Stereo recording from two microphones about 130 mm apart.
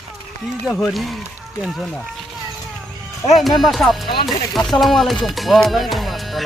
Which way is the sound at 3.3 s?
Centre (ahead or behind).